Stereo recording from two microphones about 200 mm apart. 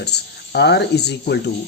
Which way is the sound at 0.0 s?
55° left (ahead or behind).